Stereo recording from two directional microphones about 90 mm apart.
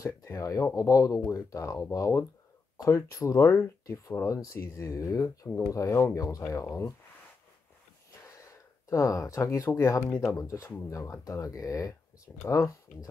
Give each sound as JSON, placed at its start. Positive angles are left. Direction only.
{"t": 0.0, "sound": "speech", "side_deg": 35}
{"t": 8.4, "sound": "speech", "side_deg": 35}